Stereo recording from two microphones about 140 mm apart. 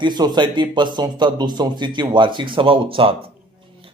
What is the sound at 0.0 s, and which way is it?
Speech, 30° right (ahead or behind).